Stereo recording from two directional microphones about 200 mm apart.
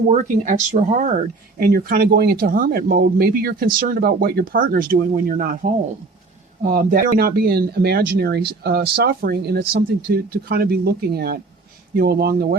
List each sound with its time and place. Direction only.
0.1 s speech: 40° right (ahead or behind)
1.5 s speech: 50° right (ahead or behind)
6.6 s speech: 45° right (ahead or behind)